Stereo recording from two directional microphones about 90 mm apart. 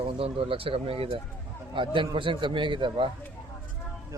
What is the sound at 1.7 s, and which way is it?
A man's voice, 70° right (ahead or behind).